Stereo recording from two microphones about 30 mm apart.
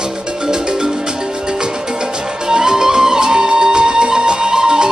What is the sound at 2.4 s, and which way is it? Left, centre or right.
Music, right.